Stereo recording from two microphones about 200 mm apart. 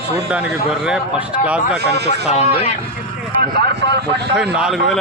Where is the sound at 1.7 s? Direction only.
55° right (ahead or behind).